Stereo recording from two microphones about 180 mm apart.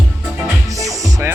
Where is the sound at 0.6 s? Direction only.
20° right (ahead or behind).